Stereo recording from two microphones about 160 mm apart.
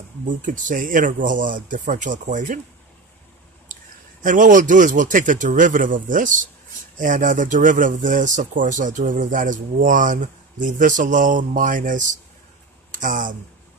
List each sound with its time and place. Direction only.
0.2 s speech: 55° right (ahead or behind)
4.2 s speech: 55° right (ahead or behind)